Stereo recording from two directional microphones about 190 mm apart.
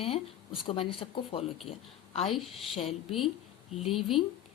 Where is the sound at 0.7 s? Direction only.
30° left (ahead or behind).